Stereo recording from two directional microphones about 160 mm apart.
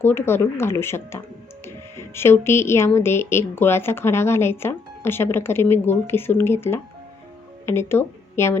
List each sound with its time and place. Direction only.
0.0 s speech: 15° left (ahead or behind)